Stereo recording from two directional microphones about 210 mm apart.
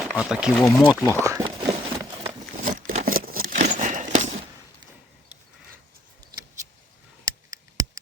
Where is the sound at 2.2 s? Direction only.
35° right (ahead or behind).